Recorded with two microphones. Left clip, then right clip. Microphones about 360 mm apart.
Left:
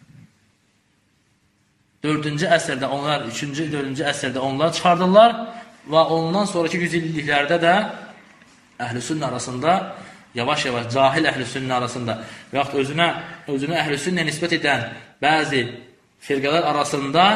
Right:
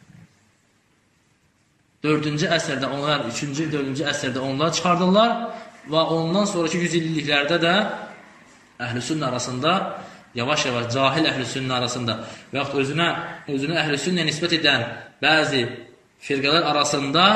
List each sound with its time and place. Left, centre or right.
2.0 s a man's voice: centre